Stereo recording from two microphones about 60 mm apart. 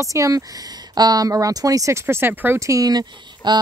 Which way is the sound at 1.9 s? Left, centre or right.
Right.